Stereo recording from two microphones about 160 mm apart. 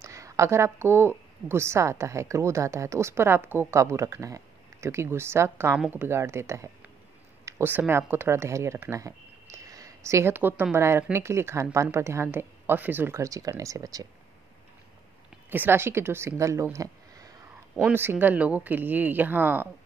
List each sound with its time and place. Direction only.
0.0 s speech: 20° right (ahead or behind)
9.7 s a sound: 20° right (ahead or behind)
10.6 s speech: 15° right (ahead or behind)
15.5 s speech: 15° right (ahead or behind)